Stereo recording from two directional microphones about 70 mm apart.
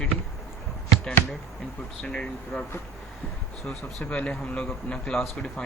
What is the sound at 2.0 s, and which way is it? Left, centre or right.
Speech, centre.